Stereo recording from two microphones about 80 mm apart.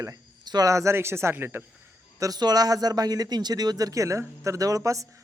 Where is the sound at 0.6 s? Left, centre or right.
Right.